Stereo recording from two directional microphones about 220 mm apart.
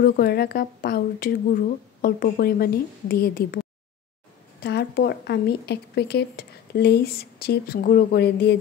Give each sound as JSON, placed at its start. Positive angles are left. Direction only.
{"t": 0.0, "sound": "speech", "side_deg": 45}
{"t": 4.6, "sound": "speech", "side_deg": 50}